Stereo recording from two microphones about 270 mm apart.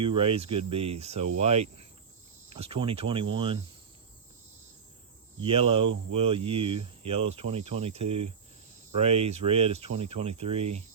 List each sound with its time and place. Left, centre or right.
0.0 s speech: centre
5.4 s speech: centre